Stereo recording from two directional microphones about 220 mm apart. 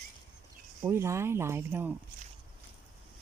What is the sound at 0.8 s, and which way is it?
Speech, 10° right (ahead or behind).